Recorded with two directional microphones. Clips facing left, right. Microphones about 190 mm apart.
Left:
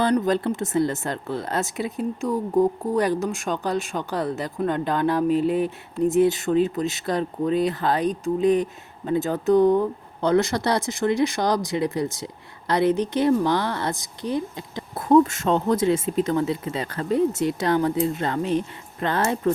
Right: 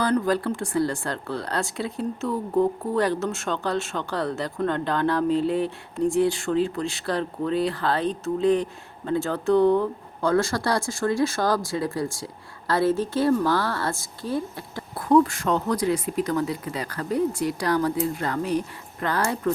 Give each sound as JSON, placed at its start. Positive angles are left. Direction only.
{"t": 0.0, "sound": "speech", "side_deg": 20}